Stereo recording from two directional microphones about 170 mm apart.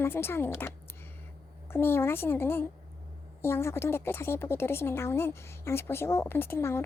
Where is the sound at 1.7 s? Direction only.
15° left (ahead or behind).